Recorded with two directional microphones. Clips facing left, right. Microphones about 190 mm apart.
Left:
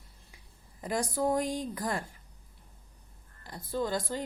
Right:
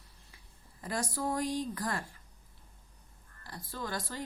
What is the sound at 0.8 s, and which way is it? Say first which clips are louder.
A woman's voice: left 5 dB; 20° left (ahead or behind).